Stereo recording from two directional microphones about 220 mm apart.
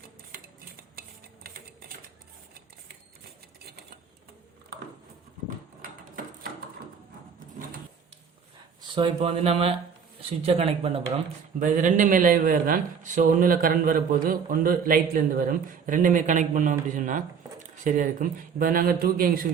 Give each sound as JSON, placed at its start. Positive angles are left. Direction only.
{"t": 9.0, "sound": "a man's voice", "side_deg": -25}